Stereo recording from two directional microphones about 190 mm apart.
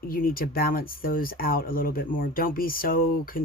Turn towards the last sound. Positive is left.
turn(degrees=50)  # may be behind; listen again after turning